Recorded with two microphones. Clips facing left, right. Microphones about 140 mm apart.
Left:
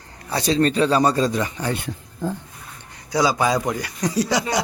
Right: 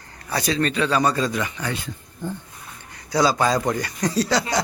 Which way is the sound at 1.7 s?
60° left (ahead or behind).